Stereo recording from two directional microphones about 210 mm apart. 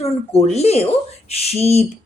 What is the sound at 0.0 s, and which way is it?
Speech, 30° left (ahead or behind).